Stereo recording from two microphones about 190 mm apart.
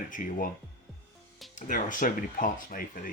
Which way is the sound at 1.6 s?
45° left (ahead or behind).